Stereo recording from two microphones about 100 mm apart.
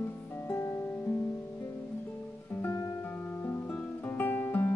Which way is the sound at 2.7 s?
30° left (ahead or behind).